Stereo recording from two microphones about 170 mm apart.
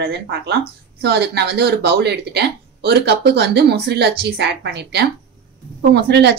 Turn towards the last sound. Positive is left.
turn(degrees=-75)  # may be behind; listen again after turning